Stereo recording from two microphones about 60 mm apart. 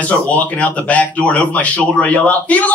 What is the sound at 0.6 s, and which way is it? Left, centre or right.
A man's voice, left.